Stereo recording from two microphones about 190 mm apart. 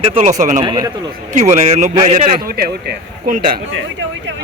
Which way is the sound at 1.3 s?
40° right (ahead or behind).